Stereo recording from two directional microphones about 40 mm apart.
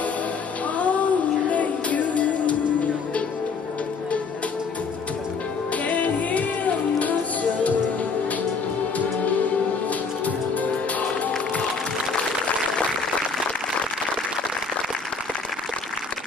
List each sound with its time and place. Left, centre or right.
0.7 s a sound: left
1.5 s music: left
5.9 s music: left
10.2 s music: left